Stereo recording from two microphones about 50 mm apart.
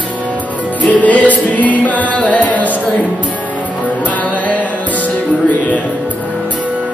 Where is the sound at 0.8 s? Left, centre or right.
Left.